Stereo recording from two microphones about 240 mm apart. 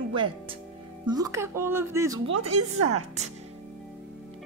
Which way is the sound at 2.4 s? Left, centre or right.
Right.